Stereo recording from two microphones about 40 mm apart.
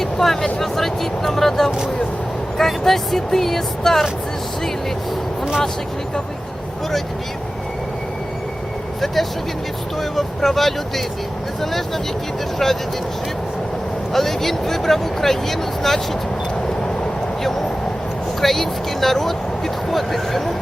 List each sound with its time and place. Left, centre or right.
0.0 s vehicle: centre
0.6 s speech: centre
10.0 s speech: centre
12.6 s speech: centre
14.1 s speech: centre
18.3 s speech: centre